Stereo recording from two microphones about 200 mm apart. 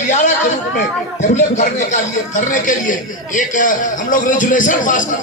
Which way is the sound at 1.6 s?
40° left (ahead or behind).